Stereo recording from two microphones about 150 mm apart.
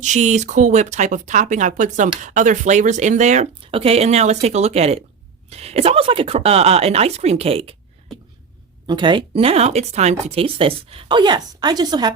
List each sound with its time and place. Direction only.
0.0 s speech: 50° right (ahead or behind)
3.6 s speech: 40° right (ahead or behind)
8.9 s speech: 30° right (ahead or behind)